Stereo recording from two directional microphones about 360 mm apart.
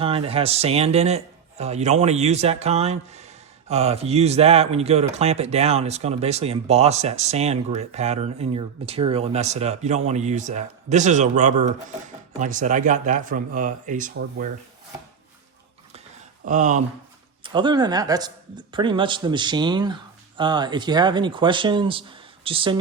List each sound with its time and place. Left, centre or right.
0.0 s speech: centre
16.5 s speech: centre